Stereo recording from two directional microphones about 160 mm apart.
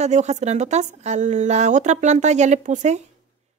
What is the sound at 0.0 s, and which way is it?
Speech, 45° right (ahead or behind).